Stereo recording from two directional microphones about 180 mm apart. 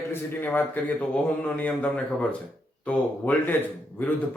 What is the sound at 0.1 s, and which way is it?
A man's voice, 10° left (ahead or behind).